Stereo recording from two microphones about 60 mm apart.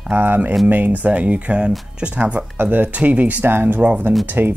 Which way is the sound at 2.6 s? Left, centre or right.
Right.